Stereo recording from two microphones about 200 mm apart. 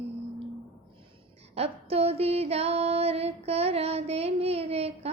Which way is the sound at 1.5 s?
30° right (ahead or behind).